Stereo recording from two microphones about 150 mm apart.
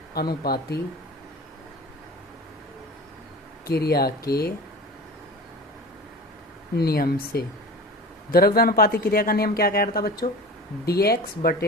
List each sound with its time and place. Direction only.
0.4 s speech: 90° left
3.7 s speech: 90° left
6.7 s speech: 90° left